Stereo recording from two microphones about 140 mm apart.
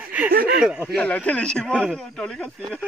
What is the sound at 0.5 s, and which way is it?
Speech, 5° right (ahead or behind).